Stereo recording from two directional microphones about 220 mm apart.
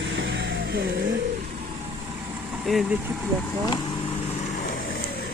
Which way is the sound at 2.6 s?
Centre (ahead or behind).